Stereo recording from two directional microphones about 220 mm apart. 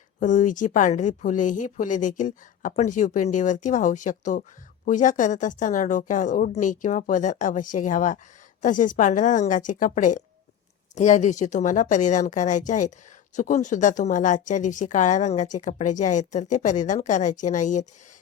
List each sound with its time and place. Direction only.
0.2 s speech: 35° left (ahead or behind)